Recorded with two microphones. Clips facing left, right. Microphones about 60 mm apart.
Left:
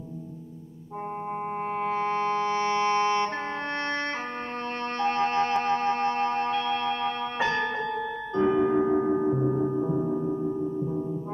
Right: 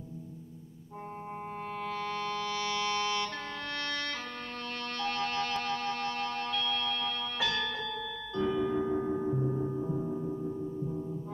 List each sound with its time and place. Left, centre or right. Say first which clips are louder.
1.8 s music: left 9 dB; left
4.9 s a sound: left 9 dB; left
8.4 s gong: left 7 dB; left